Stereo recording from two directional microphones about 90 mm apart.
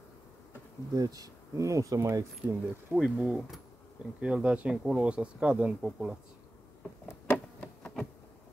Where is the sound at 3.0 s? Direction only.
5° right (ahead or behind).